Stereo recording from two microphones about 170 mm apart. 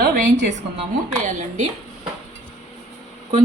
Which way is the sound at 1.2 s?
45° right (ahead or behind).